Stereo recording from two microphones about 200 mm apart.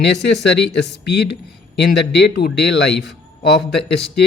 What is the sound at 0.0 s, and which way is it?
Speech, 55° left (ahead or behind).